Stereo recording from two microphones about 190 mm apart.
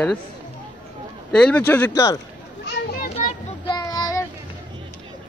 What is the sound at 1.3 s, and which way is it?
Speech, 5° left (ahead or behind).